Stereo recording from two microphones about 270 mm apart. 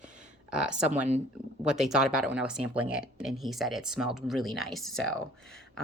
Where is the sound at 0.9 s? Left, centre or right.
Right.